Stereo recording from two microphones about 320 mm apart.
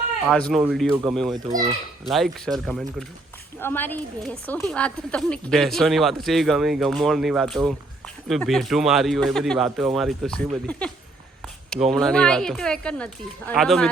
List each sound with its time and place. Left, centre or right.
0.3 s a woman's voice: centre